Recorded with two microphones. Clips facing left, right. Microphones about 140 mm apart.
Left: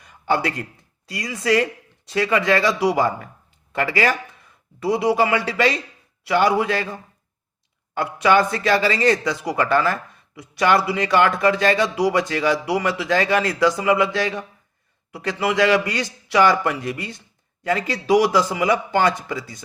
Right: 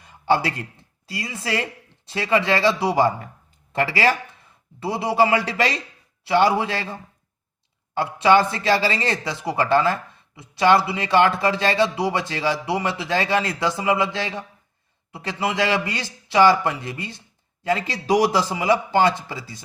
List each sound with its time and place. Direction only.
0.0 s a sound: 30° right (ahead or behind)
1.0 s speech: 25° right (ahead or behind)
18.0 s speech: 35° right (ahead or behind)